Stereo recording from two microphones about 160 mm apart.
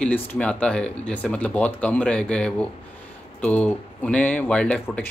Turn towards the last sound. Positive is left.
turn(degrees=5)  # may be behind; listen again after turning